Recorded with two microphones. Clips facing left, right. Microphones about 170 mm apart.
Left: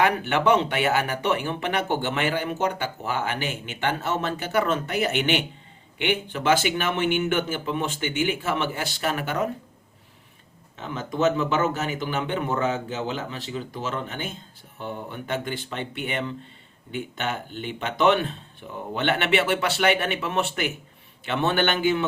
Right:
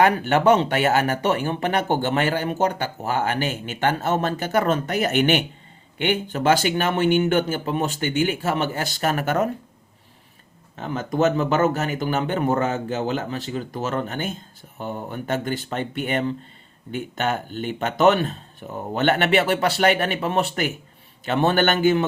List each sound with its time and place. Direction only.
0.0 s speech: 40° right (ahead or behind)
10.8 s speech: 45° right (ahead or behind)